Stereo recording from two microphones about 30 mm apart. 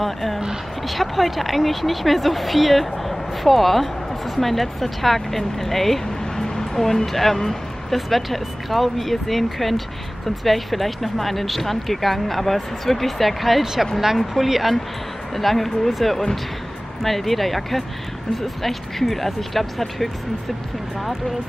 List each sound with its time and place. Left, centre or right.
0.0 s speech: centre
6.4 s speech: centre
15.3 s speech: centre